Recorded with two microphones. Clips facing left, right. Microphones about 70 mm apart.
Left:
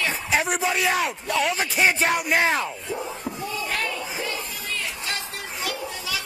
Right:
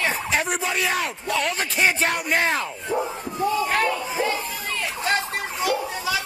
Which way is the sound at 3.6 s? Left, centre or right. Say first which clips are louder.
Right 4 dB; right.